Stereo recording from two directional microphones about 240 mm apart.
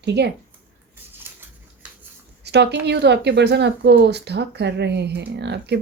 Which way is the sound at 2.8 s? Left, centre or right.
Right.